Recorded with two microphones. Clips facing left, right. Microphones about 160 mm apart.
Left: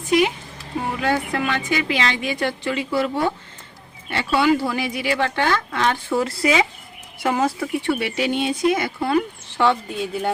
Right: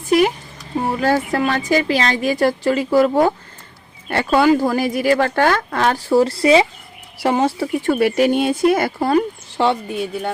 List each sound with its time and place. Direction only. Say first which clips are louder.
0.1 s a woman's voice: right 3 dB; 45° right (ahead or behind); by 7.7 s 30° right (ahead or behind)
7.7 s speech: right 6 dB; 45° right (ahead or behind)
9.1 s speech: right 4 dB; 30° right (ahead or behind)